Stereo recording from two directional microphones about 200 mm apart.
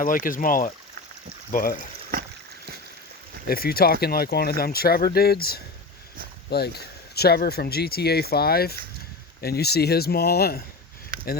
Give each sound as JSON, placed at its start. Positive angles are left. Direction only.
{"t": 0.0, "sound": "speech", "side_deg": 45}
{"t": 3.4, "sound": "speech", "side_deg": 50}